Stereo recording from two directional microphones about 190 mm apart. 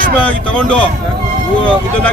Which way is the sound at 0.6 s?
5° left (ahead or behind).